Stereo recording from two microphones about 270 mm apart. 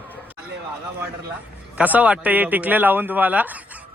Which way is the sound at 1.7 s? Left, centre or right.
Centre.